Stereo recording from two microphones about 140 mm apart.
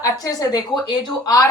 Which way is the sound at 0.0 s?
25° left (ahead or behind).